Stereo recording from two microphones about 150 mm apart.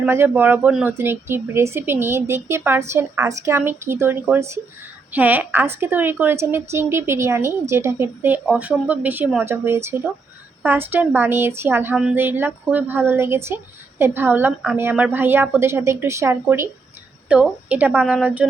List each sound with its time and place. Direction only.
0.0 s a woman's voice: 15° right (ahead or behind)
17.2 s a woman's voice: 5° right (ahead or behind)